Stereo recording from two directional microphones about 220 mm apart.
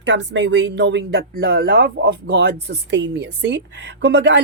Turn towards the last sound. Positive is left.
turn(degrees=-50)  # may be behind; listen again after turning